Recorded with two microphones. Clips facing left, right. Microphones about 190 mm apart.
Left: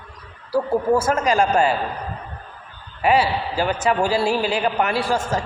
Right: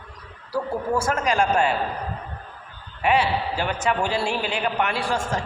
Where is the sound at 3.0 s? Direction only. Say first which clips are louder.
Left 3 dB; 35° left (ahead or behind).